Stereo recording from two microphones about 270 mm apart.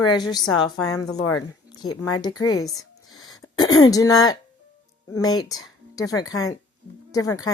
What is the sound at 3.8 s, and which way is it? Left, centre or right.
Speech, centre.